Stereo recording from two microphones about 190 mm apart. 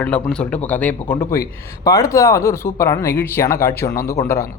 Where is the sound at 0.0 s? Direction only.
5° left (ahead or behind).